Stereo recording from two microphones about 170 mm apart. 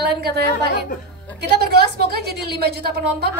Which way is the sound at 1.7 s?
70° right (ahead or behind).